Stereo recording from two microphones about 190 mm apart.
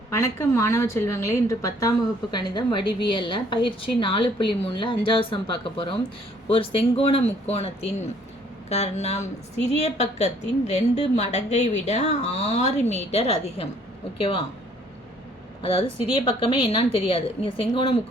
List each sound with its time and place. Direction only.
0.1 s a woman's voice: 15° left (ahead or behind)
15.6 s a woman's voice: 30° left (ahead or behind)